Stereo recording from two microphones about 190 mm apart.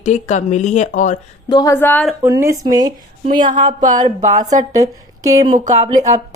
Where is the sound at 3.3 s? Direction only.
45° right (ahead or behind).